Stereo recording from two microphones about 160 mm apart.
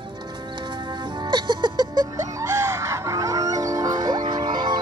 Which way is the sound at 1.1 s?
30° right (ahead or behind).